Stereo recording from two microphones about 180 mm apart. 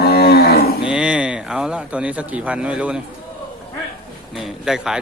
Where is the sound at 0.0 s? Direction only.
60° left (ahead or behind).